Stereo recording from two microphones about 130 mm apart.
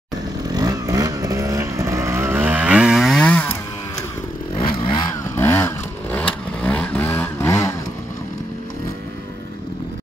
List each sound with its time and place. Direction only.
0.5 s vehicle: 30° right (ahead or behind); by 3.3 s centre (ahead or behind)
3.3 s chainsaw: 10° left (ahead or behind)
4.6 s motorcycle: 40° left (ahead or behind)
5.0 s vehicle: 20° left (ahead or behind)